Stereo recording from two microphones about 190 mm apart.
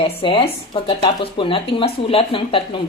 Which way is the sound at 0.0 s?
30° left (ahead or behind).